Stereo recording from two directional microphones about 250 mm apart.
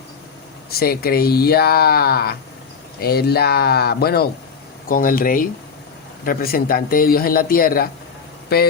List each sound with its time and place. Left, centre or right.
0.7 s speech: left